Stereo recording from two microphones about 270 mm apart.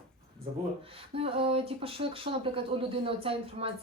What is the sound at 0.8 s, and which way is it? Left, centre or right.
Speech, right.